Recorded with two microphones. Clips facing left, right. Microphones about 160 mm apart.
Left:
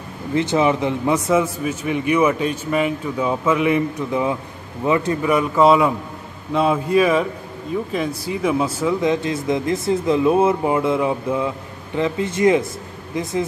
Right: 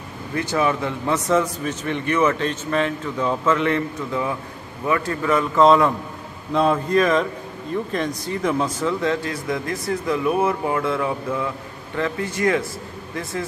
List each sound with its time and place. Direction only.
0.3 s a man's voice: 20° left (ahead or behind)